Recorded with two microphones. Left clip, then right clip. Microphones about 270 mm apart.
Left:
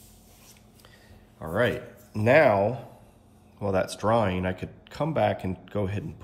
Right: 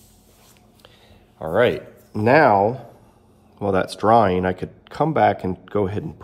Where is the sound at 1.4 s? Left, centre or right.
Right.